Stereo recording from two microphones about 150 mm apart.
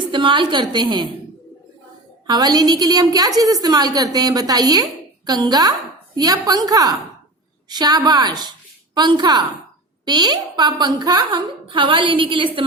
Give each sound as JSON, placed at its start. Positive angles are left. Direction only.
{"t": 0.1, "sound": "a woman's voice", "side_deg": -35}
{"t": 2.2, "sound": "a woman's voice", "side_deg": -30}